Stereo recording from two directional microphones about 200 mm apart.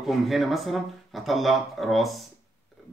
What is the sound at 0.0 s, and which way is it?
Speech, centre (ahead or behind).